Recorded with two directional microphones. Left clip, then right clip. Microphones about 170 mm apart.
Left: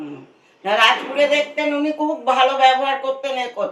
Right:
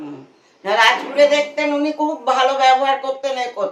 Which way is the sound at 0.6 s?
25° right (ahead or behind).